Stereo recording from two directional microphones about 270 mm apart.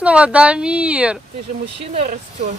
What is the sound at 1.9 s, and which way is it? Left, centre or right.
Speech, right.